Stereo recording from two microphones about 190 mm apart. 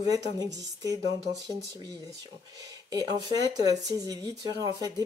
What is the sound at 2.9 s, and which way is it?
Speech, 20° right (ahead or behind).